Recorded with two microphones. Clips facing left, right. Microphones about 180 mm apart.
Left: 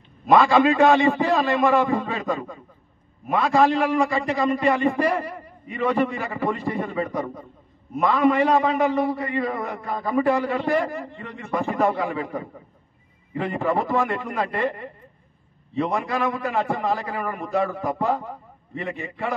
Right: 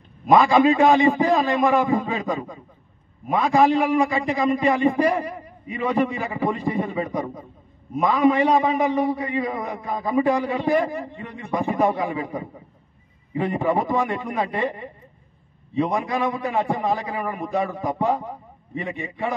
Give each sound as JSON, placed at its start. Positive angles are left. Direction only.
{"t": 0.3, "sound": "a man's voice", "side_deg": -15}